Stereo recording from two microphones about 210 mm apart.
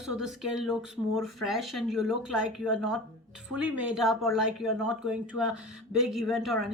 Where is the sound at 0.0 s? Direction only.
Centre (ahead or behind).